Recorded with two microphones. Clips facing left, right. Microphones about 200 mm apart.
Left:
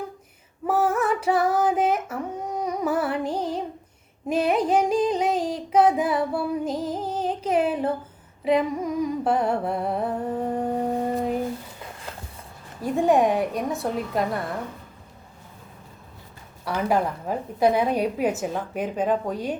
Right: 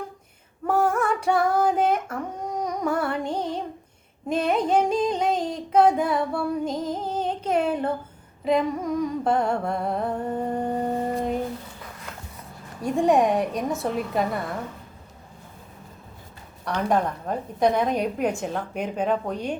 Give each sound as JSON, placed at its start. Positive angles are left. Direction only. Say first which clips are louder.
{"t": 0.7, "sound": "female singing", "louder": "even", "side_deg": 5}
{"t": 4.3, "sound": "music", "louder": "left 1 dB", "side_deg": 5}
{"t": 8.4, "sound": "humming", "louder": "left 1 dB", "side_deg": 5}
{"t": 12.1, "sound": "a sound", "louder": "left 2 dB", "side_deg": 30}
{"t": 12.8, "sound": "a woman's voice", "louder": "even", "side_deg": 0}
{"t": 16.6, "sound": "a woman's voice", "louder": "even", "side_deg": 5}